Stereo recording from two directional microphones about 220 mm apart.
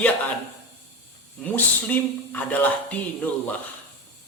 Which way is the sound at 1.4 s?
5° left (ahead or behind).